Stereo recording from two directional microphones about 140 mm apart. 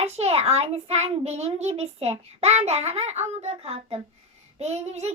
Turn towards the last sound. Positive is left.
turn(degrees=-50)  # may be behind; listen again after turning